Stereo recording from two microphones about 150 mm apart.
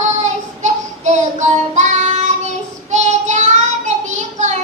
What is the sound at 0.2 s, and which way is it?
Child singing, 50° right (ahead or behind).